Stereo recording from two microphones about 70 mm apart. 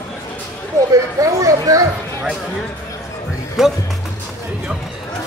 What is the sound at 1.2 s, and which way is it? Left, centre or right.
Speech, right.